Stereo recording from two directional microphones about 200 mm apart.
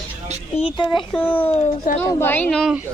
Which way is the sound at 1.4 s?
30° left (ahead or behind).